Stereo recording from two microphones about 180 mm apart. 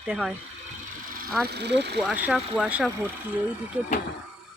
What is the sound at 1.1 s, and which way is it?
Vehicle, 50° right (ahead or behind).